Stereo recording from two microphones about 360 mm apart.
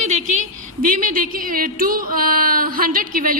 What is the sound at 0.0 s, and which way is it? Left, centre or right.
A woman's voice, centre.